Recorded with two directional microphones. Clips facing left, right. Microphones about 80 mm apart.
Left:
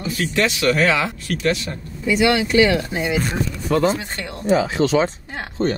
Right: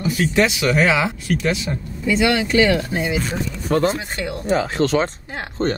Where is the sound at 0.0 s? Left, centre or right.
Centre.